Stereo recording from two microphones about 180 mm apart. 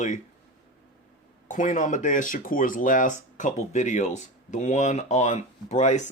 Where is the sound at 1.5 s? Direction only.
45° left (ahead or behind).